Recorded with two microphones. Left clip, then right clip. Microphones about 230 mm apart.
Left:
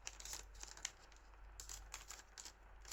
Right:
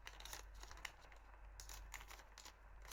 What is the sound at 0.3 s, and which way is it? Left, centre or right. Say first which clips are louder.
Scissors: left 2 dB; centre.